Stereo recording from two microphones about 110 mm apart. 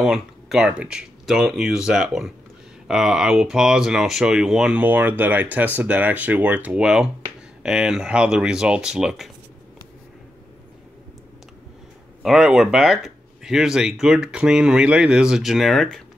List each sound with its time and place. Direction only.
0.0 s speech: 5° right (ahead or behind)
12.2 s speech: 5° right (ahead or behind)